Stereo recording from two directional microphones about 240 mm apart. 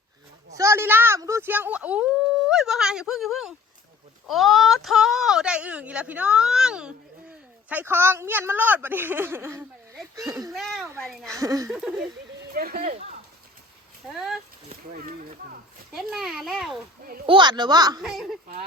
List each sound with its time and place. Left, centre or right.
0.5 s a sound: centre
4.3 s speech: centre
10.5 s speech: centre
11.3 s a child's voice: centre
11.7 s speech: centre
12.7 s speech: right
14.1 s speech: centre
15.9 s speech: centre
17.2 s a child's voice: centre
18.0 s speech: centre